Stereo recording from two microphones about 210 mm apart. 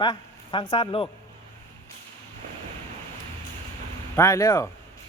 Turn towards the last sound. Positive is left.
turn(degrees=15)  # may be behind; listen again after turning